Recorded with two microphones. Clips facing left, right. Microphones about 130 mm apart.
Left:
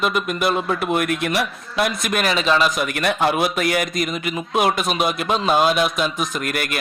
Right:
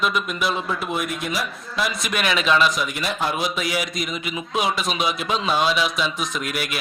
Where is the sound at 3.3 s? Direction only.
55° left (ahead or behind).